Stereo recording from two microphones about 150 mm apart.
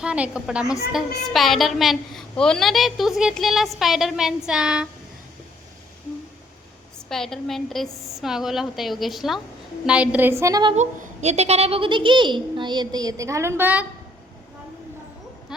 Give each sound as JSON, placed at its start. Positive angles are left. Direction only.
{"t": 0.0, "sound": "a woman's voice", "side_deg": -5}
{"t": 7.1, "sound": "a woman's voice", "side_deg": 5}
{"t": 10.8, "sound": "a child's voice", "side_deg": -50}